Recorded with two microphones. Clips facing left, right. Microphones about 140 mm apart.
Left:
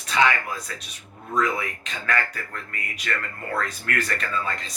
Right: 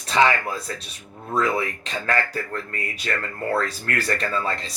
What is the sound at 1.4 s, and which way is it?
Speech, 30° right (ahead or behind).